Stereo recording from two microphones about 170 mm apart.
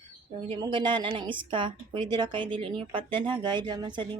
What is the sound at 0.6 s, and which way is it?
A woman's voice, 30° right (ahead or behind).